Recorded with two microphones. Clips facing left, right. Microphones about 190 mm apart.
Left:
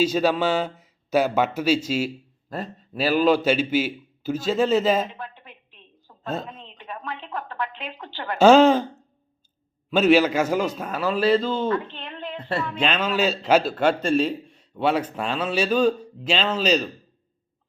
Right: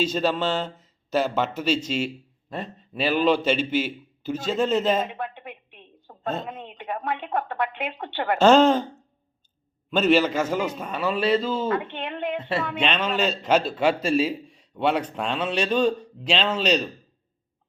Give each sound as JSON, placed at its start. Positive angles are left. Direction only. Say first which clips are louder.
{"t": 0.0, "sound": "a man's voice", "louder": "left 3 dB", "side_deg": 5}
{"t": 5.0, "sound": "a sound", "louder": "right 5 dB", "side_deg": -60}
{"t": 7.3, "sound": "a woman's voice", "louder": "right 4 dB", "side_deg": -70}
{"t": 8.4, "sound": "speech", "louder": "left 3 dB", "side_deg": 10}
{"t": 9.9, "sound": "a man's voice", "louder": "left 2 dB", "side_deg": 10}
{"t": 11.8, "sound": "speech", "louder": "right 5 dB", "side_deg": -75}
{"t": 12.8, "sound": "a man's voice", "louder": "left 3 dB", "side_deg": 5}